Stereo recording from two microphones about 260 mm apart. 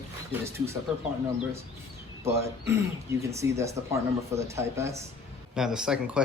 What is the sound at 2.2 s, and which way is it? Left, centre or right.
Speech, centre.